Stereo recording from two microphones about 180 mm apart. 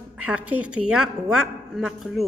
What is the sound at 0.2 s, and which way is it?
A woman's voice, 5° right (ahead or behind).